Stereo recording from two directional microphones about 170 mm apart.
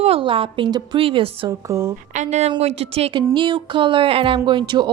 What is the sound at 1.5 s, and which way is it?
Speech, 15° right (ahead or behind).